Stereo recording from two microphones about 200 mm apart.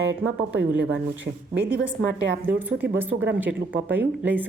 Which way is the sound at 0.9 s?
65° right (ahead or behind).